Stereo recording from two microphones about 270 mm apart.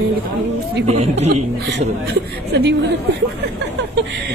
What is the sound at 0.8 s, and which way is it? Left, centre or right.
Speech, right.